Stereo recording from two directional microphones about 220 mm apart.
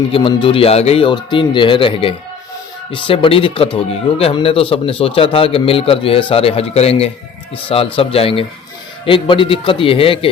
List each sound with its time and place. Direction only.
0.1 s speech: 25° left (ahead or behind)